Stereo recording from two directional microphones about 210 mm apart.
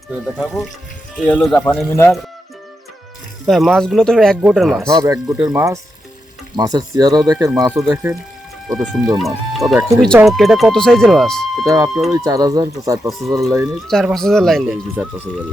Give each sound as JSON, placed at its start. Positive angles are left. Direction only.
{"t": 0.3, "sound": "speech", "side_deg": 0}
{"t": 3.4, "sound": "speech", "side_deg": 0}
{"t": 4.9, "sound": "speech", "side_deg": -15}
{"t": 8.8, "sound": "speech", "side_deg": 0}
{"t": 11.6, "sound": "speech", "side_deg": -15}
{"t": 13.1, "sound": "speech", "side_deg": 0}